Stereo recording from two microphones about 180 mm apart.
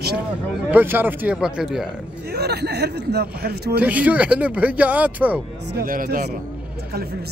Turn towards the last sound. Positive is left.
turn(degrees=-50)  # may be behind; listen again after turning